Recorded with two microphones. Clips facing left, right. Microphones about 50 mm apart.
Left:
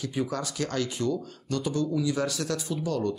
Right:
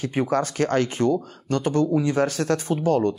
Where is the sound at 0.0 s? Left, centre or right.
Right.